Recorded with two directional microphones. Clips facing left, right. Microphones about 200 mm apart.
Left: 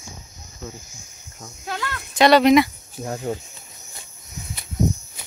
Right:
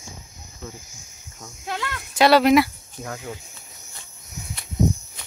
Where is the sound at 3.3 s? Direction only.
40° left (ahead or behind).